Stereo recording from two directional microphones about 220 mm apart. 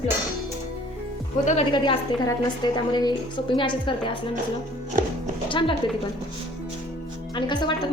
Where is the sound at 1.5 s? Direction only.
25° left (ahead or behind).